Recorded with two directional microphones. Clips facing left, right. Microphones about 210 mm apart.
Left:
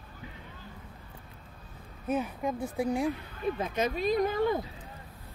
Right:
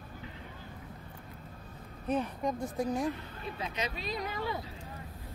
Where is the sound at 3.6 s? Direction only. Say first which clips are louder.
Left 5 dB; 50° left (ahead or behind).